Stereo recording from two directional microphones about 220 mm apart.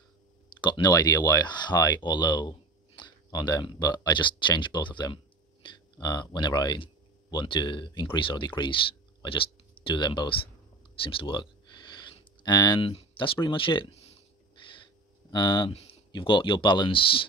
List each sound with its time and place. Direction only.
0.6 s speech: 20° left (ahead or behind)
9.9 s speech: 20° left (ahead or behind)
15.3 s speech: 20° left (ahead or behind)